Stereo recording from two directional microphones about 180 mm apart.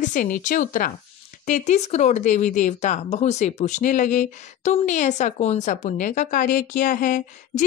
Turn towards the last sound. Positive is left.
turn(degrees=50)  # may be behind; listen again after turning